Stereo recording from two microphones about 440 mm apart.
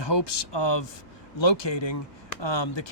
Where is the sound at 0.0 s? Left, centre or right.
Left.